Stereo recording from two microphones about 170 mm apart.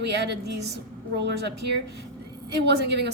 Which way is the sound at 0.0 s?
85° right.